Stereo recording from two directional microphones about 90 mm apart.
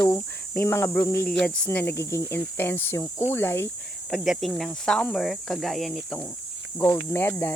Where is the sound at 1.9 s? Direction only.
35° left (ahead or behind).